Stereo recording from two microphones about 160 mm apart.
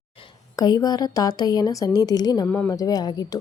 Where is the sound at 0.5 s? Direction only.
25° left (ahead or behind).